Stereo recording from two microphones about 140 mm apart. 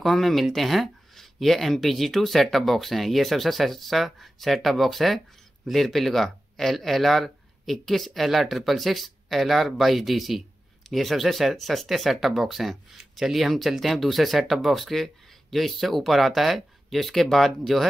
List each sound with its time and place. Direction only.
0.0 s speech: centre (ahead or behind)